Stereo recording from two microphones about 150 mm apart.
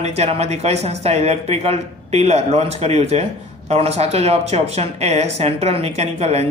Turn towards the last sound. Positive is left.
turn(degrees=-45)  # may be behind; listen again after turning